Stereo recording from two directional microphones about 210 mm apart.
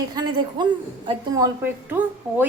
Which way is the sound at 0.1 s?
20° right (ahead or behind).